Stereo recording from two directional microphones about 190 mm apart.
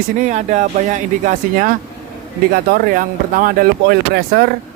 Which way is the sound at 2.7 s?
45° right (ahead or behind).